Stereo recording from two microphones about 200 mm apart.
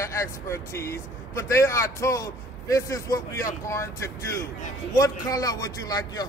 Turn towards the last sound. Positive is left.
turn(degrees=20)  # may be behind; listen again after turning